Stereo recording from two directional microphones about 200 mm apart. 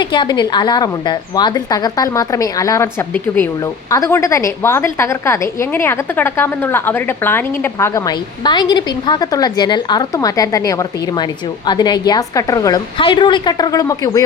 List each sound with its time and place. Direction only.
0.0 s a woman's voice: 20° left (ahead or behind)